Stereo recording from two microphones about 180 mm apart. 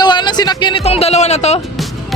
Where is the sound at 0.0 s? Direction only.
25° left (ahead or behind).